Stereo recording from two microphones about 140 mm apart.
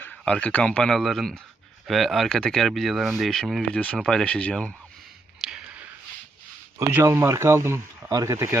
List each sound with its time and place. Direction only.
0.0 s a man's voice: 10° left (ahead or behind)
5.4 s a sound: 5° right (ahead or behind)
6.7 s speech: 20° right (ahead or behind)